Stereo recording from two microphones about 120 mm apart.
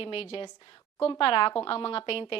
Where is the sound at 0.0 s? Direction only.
50° left (ahead or behind).